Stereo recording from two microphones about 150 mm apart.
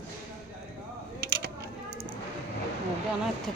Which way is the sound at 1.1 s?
90° right.